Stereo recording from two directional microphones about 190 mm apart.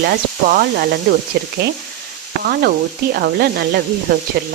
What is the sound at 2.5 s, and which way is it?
Speech, 55° right (ahead or behind).